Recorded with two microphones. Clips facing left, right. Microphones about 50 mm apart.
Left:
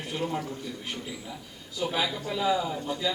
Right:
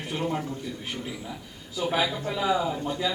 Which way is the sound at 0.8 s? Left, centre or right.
Centre.